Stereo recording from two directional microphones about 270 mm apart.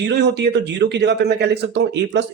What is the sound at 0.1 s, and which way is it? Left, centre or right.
Speech, right.